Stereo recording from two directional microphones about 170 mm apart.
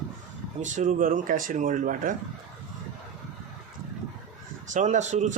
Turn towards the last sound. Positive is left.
turn(degrees=-45)  # may be behind; listen again after turning